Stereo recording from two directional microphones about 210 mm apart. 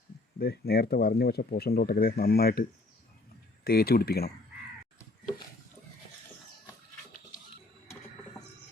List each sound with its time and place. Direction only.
0.3 s speech: 50° left (ahead or behind)